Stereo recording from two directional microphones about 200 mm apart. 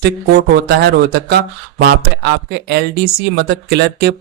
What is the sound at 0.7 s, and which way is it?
Speech, 50° right (ahead or behind).